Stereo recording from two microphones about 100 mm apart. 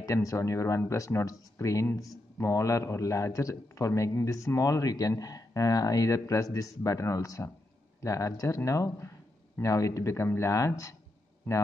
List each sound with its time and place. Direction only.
0.0 s a man's voice: 35° left (ahead or behind)